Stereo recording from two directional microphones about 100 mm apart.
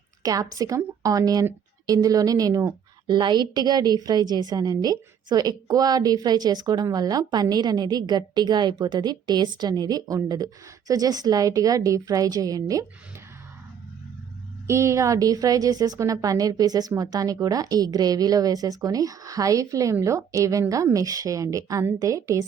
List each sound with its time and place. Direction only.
0.2 s a woman's voice: 35° right (ahead or behind)
3.1 s a woman's voice: 50° right (ahead or behind)
14.7 s a woman's voice: 30° right (ahead or behind)